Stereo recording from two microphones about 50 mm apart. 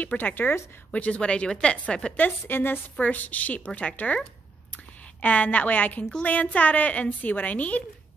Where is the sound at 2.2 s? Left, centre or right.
Left.